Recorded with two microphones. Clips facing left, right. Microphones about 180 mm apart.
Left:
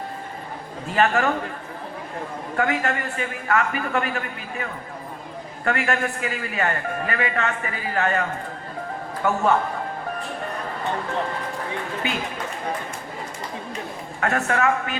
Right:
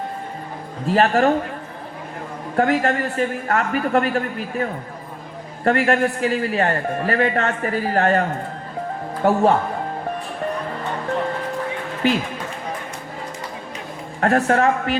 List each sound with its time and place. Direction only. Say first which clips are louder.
0.9 s a man's voice: right 4 dB; 35° right (ahead or behind)
2.6 s a man's voice: right 5 dB; 35° right (ahead or behind)
14.2 s a man's voice: right 6 dB; 35° right (ahead or behind)